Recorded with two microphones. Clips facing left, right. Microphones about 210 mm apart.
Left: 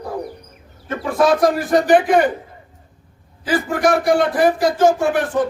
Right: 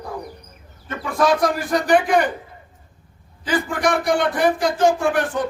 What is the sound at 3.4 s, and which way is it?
Speech, 5° left (ahead or behind).